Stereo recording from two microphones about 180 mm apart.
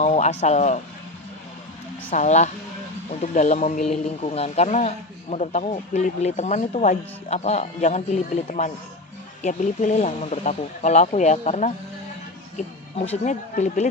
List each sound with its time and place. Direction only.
0.0 s speech: 40° left (ahead or behind)
2.0 s speech: 40° left (ahead or behind)
13.1 s speech: 40° left (ahead or behind)